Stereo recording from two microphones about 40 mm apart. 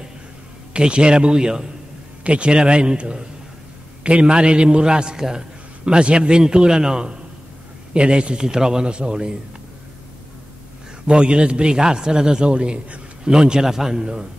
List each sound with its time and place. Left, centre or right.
0.7 s a man's voice: right
11.1 s a man's voice: right